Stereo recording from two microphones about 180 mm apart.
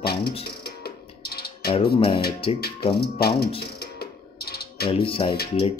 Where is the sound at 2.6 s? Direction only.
60° left (ahead or behind).